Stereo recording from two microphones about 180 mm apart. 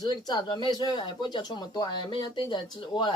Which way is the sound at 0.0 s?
20° left (ahead or behind).